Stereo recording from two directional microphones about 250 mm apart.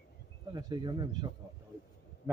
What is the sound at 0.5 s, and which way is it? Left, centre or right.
Speech, centre.